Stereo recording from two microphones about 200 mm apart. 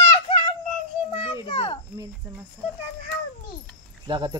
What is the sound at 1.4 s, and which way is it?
Children playing, 25° left (ahead or behind).